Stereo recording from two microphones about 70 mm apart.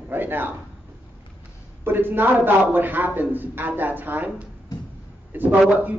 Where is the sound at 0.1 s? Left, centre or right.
Right.